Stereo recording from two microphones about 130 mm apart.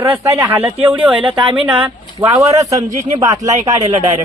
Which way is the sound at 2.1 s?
25° right (ahead or behind).